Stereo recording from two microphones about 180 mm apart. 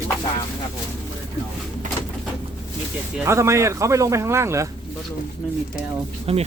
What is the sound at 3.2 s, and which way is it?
Speech, 15° right (ahead or behind).